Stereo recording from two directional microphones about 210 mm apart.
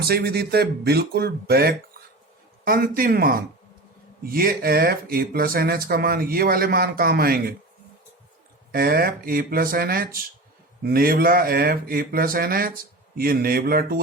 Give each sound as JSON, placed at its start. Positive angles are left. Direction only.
{"t": 0.0, "sound": "speech", "side_deg": -50}
{"t": 8.7, "sound": "speech", "side_deg": -45}